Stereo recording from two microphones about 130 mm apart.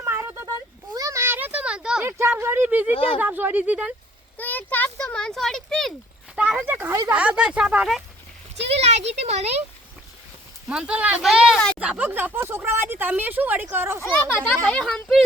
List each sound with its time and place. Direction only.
0.0 s a sound: 15° right (ahead or behind)
2.0 s speech: 20° right (ahead or behind)
2.9 s speech: 45° left (ahead or behind)
3.2 s speech: 15° right (ahead or behind)
4.4 s speech: 15° left (ahead or behind); by 7.9 s 10° right (ahead or behind)
8.7 s speech: 55° right (ahead or behind)
10.7 s speech: 10° right (ahead or behind)
14.0 s speech: 15° left (ahead or behind)